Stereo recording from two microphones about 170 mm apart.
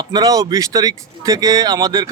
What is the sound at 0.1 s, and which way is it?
Speech, 20° right (ahead or behind).